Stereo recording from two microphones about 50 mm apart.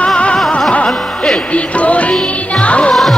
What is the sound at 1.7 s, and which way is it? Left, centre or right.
Music, left.